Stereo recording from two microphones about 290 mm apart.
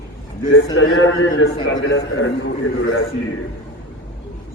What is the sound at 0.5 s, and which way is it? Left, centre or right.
A man's voice, left.